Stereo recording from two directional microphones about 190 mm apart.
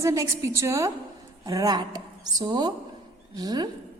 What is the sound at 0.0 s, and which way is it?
A woman's voice, 15° right (ahead or behind).